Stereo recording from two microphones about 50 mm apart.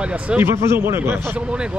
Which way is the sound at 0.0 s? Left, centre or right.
Right.